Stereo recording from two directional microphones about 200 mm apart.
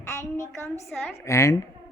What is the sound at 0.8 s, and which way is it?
Speech, centre (ahead or behind).